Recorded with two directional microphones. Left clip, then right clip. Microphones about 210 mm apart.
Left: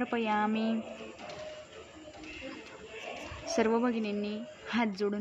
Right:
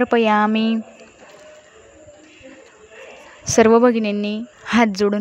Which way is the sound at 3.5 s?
50° right (ahead or behind).